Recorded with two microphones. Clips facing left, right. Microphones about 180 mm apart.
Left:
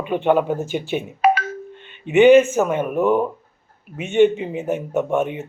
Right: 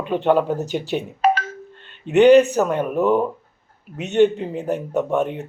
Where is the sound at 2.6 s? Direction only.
10° left (ahead or behind).